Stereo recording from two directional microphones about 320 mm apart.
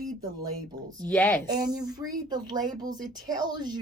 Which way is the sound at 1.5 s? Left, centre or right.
Centre.